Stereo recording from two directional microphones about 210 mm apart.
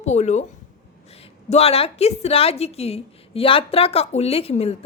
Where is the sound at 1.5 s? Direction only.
30° left (ahead or behind).